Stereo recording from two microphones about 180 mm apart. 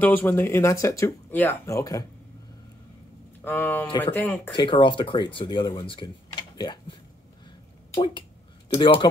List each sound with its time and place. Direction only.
0.0 s speech: 10° left (ahead or behind)
3.4 s speech: 10° left (ahead or behind)
4.6 s speech: 25° left (ahead or behind)
7.9 s a sound: 25° left (ahead or behind)